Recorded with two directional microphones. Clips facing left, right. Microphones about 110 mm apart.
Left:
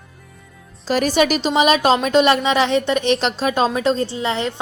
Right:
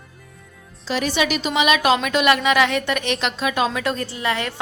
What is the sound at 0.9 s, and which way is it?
A woman's voice, 45° left (ahead or behind).